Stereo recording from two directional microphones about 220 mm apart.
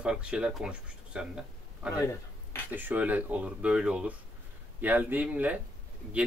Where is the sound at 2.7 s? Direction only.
5° right (ahead or behind).